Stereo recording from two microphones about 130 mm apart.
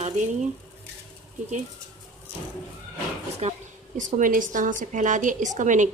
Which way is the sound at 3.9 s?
75° right (ahead or behind).